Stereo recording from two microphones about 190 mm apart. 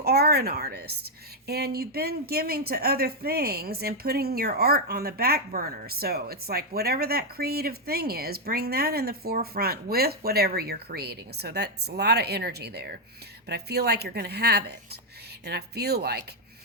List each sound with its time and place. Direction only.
0.0 s a woman's voice: 55° right (ahead or behind)